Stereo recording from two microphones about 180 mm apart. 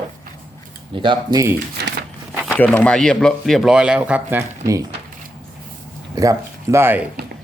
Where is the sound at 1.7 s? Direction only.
65° right (ahead or behind).